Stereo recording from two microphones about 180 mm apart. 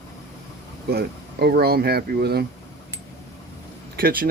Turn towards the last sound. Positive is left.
turn(degrees=-55)  # may be behind; listen again after turning